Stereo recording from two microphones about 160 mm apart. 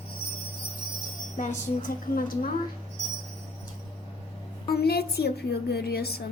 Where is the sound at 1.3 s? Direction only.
60° left (ahead or behind).